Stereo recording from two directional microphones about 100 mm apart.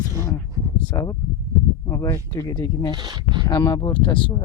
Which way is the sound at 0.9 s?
40° left (ahead or behind).